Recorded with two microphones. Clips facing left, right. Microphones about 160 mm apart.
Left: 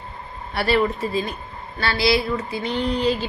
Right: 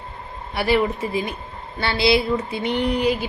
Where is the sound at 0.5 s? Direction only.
15° right (ahead or behind).